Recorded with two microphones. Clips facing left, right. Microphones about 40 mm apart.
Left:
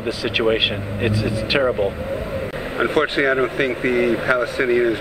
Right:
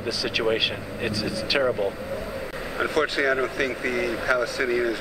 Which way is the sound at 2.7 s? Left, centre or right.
Left.